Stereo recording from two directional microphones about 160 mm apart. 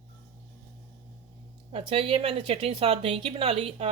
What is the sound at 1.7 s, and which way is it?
Speech, 35° right (ahead or behind).